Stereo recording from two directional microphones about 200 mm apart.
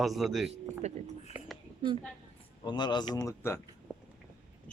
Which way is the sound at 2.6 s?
20° left (ahead or behind).